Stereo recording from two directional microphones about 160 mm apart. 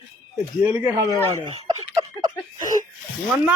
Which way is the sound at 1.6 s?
20° right (ahead or behind).